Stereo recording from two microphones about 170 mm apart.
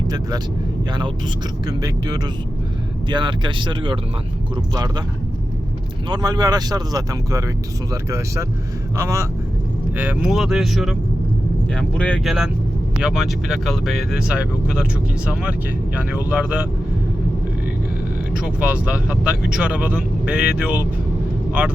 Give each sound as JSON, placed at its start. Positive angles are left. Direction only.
{"t": 1.6, "sound": "speech", "side_deg": -25}
{"t": 6.1, "sound": "speech", "side_deg": -25}
{"t": 9.0, "sound": "speech", "side_deg": -15}
{"t": 10.0, "sound": "speech", "side_deg": -5}
{"t": 18.3, "sound": "speech", "side_deg": -5}